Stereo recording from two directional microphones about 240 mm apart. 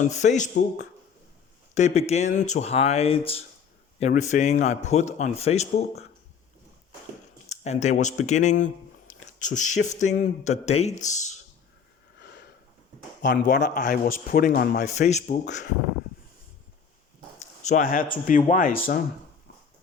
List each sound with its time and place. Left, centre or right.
0.0 s speech: left
1.7 s speech: left
7.5 s speech: left
12.2 s sniff: left
13.4 s a man's voice: left
17.6 s a man's voice: left